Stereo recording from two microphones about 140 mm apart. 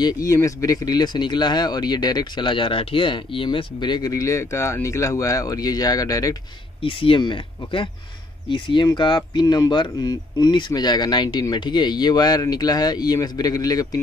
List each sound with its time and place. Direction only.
0.0 s speech: 25° left (ahead or behind)
6.8 s speech: 40° left (ahead or behind)